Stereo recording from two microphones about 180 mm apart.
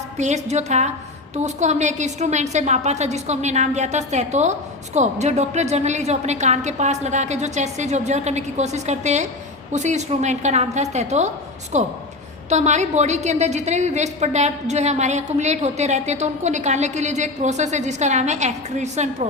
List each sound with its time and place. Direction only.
0.2 s a woman's voice: 40° right (ahead or behind)